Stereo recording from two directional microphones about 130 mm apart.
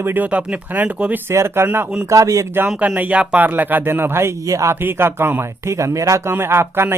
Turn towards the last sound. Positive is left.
turn(degrees=-20)  # may be behind; listen again after turning